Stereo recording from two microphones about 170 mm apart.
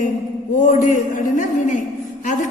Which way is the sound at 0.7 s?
50° left (ahead or behind).